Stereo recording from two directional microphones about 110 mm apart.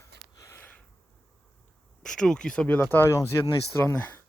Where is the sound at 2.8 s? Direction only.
20° left (ahead or behind).